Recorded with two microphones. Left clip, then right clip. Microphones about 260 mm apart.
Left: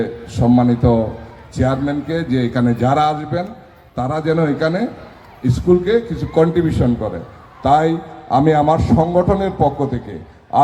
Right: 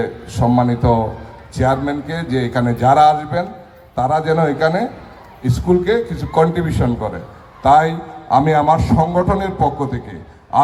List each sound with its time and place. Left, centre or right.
0.0 s a man's voice: right